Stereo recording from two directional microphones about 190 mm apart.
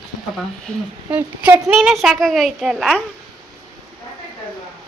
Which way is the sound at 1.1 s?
10° right (ahead or behind).